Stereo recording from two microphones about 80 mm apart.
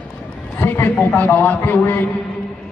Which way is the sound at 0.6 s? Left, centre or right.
Left.